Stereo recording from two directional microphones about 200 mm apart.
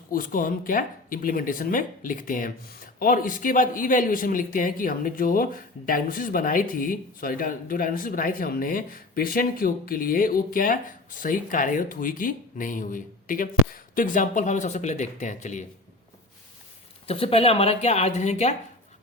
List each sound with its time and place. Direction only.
0.1 s speech: 45° left (ahead or behind)
17.1 s speech: 30° left (ahead or behind)